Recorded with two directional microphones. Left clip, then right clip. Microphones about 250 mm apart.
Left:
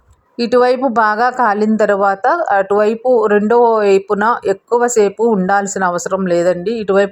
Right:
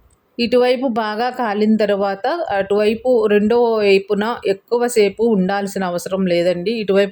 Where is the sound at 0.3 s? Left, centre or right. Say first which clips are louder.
Left 3 dB; centre.